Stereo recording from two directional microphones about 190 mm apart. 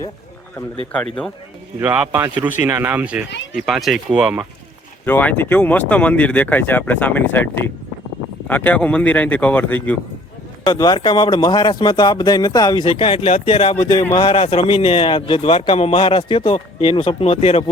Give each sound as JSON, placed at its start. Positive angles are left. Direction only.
{"t": 1.8, "sound": "speech", "side_deg": -10}
{"t": 5.0, "sound": "speech", "side_deg": 10}
{"t": 10.7, "sound": "a man's voice", "side_deg": 20}